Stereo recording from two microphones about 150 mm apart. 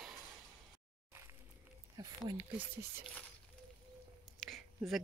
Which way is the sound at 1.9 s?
30° right (ahead or behind).